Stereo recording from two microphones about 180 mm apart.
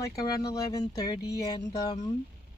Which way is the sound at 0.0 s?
20° left (ahead or behind).